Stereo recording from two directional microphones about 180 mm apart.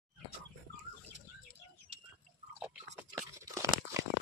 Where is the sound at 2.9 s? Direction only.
15° right (ahead or behind).